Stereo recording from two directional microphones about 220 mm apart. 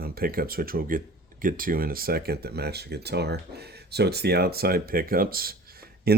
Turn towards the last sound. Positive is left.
turn(degrees=-45)  # may be behind; listen again after turning